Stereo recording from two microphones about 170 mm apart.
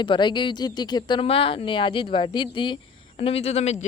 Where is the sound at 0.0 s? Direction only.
30° left (ahead or behind).